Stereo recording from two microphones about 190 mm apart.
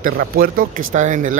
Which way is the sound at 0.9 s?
40° right (ahead or behind).